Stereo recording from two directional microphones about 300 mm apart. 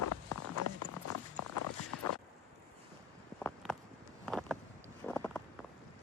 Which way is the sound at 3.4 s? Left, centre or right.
Centre.